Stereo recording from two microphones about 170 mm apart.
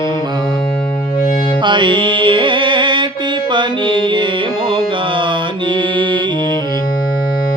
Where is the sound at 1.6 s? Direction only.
30° right (ahead or behind).